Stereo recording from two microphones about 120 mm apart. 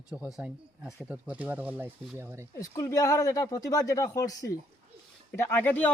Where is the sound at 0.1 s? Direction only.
5° right (ahead or behind).